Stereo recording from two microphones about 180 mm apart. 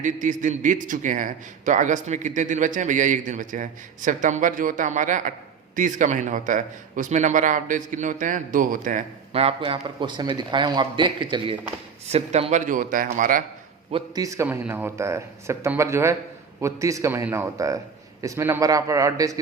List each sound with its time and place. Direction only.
0.0 s a man's voice: 45° right (ahead or behind); by 11.6 s 25° right (ahead or behind)
12.1 s a man's voice: 35° right (ahead or behind)
13.9 s a man's voice: 20° right (ahead or behind)